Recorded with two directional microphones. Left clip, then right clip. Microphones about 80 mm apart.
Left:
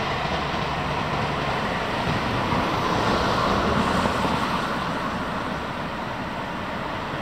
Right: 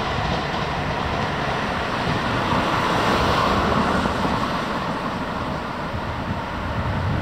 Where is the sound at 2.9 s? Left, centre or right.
Right.